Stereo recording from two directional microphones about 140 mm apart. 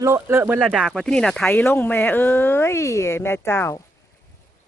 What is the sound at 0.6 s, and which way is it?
Speech, centre (ahead or behind).